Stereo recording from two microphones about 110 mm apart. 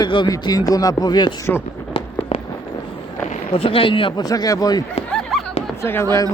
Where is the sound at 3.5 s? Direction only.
55° left (ahead or behind).